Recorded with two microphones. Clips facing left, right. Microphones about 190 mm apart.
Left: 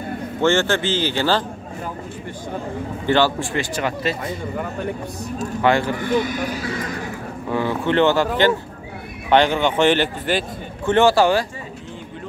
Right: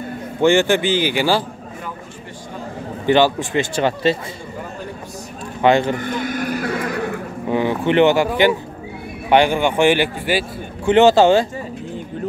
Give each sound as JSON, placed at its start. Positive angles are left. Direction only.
{"t": 0.4, "sound": "speech", "side_deg": -15}
{"t": 3.1, "sound": "speech", "side_deg": -15}
{"t": 5.6, "sound": "speech", "side_deg": -20}
{"t": 5.9, "sound": "speech", "side_deg": -50}
{"t": 7.4, "sound": "speech", "side_deg": -20}
{"t": 10.9, "sound": "speech", "side_deg": -20}